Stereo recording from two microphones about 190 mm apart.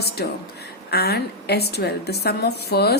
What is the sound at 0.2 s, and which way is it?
Speech, 60° left (ahead or behind).